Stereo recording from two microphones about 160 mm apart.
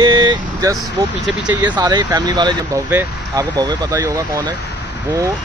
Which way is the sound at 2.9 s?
15° right (ahead or behind).